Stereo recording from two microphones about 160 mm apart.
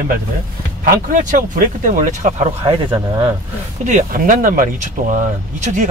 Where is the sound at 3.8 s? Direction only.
55° right (ahead or behind).